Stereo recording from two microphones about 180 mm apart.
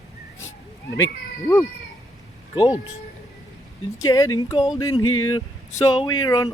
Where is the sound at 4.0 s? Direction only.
20° left (ahead or behind).